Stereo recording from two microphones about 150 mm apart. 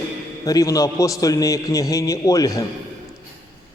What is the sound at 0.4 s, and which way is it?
A man's voice, 25° left (ahead or behind).